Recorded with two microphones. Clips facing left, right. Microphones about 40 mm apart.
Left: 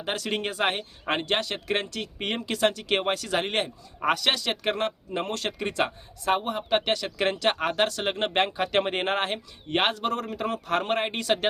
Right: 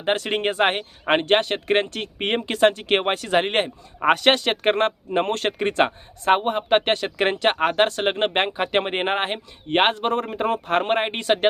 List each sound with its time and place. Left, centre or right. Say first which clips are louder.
0.0 s speech: right 7 dB; right